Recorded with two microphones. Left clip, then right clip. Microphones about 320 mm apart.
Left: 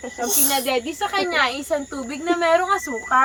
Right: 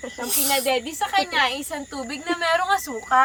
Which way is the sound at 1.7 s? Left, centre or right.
Centre.